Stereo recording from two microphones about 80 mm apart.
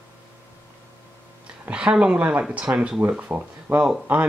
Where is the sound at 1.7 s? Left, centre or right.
Centre.